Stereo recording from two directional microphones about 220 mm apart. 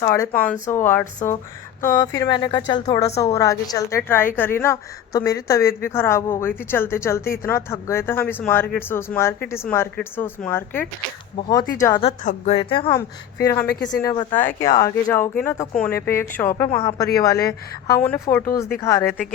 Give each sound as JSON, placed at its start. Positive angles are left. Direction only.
{"t": 0.0, "sound": "a woman's voice", "side_deg": 15}
{"t": 12.0, "sound": "a woman's voice", "side_deg": 30}